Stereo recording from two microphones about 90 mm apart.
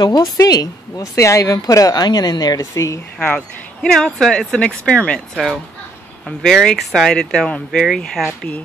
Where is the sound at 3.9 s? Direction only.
5° left (ahead or behind).